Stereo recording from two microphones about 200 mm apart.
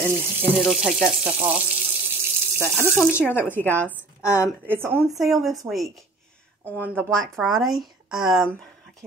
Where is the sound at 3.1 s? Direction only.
10° left (ahead or behind).